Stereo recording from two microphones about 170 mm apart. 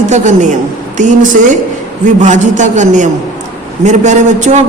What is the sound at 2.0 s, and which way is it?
A woman's voice, 45° right (ahead or behind).